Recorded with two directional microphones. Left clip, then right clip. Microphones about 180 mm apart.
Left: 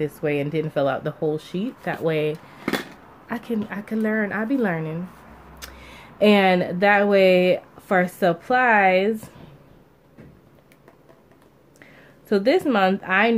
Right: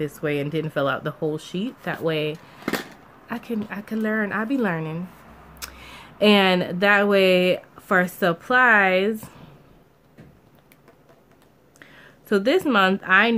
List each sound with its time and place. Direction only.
0.0 s speech: 10° right (ahead or behind)
11.8 s speech: 10° right (ahead or behind)